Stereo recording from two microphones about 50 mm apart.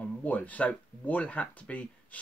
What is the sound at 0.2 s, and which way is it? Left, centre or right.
Speech, left.